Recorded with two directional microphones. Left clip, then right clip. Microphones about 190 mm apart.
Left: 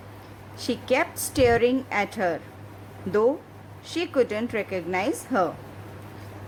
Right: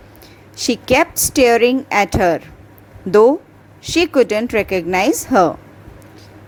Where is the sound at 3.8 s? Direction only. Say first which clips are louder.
Right 10 dB; 35° right (ahead or behind).